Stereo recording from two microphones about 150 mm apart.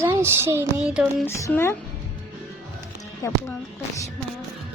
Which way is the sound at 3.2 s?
20° left (ahead or behind).